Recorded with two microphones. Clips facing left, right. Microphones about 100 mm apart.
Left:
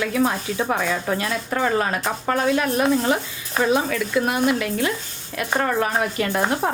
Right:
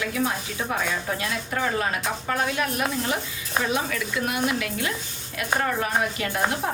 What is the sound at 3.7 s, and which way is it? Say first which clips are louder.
A woman's voice: left 6 dB; 35° left (ahead or behind).